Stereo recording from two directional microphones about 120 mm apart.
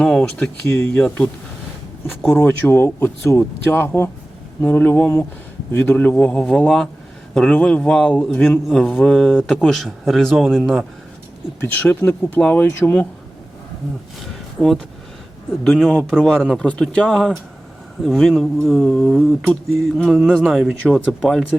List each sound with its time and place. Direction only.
0.0 s a man's voice: 5° left (ahead or behind)
11.6 s speech: 15° left (ahead or behind)
14.3 s a sound: centre (ahead or behind)
15.6 s a man's voice: 5° left (ahead or behind)